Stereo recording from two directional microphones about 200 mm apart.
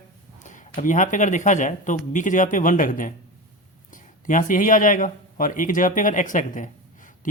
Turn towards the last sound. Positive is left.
turn(degrees=40)  # may be behind; listen again after turning